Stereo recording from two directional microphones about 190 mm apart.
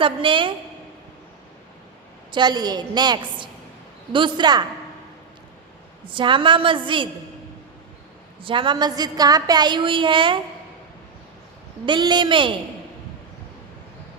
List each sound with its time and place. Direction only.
0.0 s a woman's voice: 25° right (ahead or behind)
2.3 s a woman's voice: 20° right (ahead or behind)
6.1 s a woman's voice: 25° right (ahead or behind)
8.4 s a woman's voice: 25° right (ahead or behind)
11.9 s a woman's voice: 25° right (ahead or behind)